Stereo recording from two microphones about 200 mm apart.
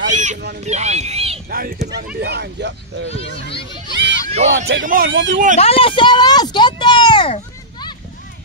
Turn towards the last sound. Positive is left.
turn(degrees=25)  # may be behind; listen again after turning